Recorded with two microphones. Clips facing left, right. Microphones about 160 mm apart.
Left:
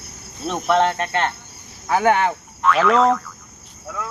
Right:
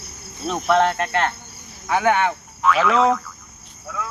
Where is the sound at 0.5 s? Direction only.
25° left (ahead or behind).